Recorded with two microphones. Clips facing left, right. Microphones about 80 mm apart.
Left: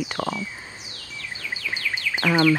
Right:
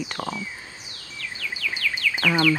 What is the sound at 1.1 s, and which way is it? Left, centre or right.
Bird vocalization, left.